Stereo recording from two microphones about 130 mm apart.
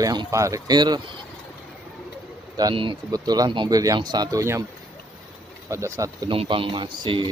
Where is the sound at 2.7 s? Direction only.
40° right (ahead or behind).